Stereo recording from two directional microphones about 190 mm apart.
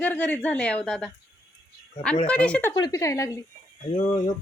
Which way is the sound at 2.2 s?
5° left (ahead or behind).